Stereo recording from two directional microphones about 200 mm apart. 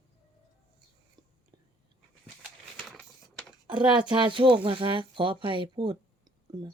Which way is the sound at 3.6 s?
20° right (ahead or behind).